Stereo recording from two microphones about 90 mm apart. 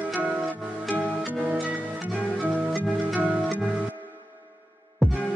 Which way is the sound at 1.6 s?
15° right (ahead or behind).